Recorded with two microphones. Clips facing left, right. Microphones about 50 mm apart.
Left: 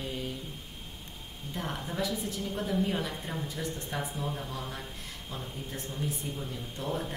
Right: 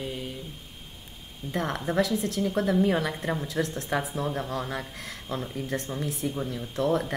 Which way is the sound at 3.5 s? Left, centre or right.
Right.